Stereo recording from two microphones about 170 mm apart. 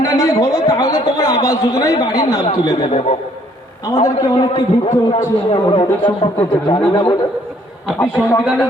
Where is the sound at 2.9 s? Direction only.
40° left (ahead or behind).